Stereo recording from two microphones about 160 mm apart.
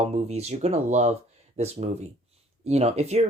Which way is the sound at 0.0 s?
40° right (ahead or behind).